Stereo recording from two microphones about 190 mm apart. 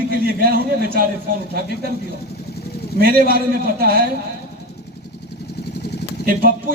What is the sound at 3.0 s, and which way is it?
A man's voice, 55° right (ahead or behind).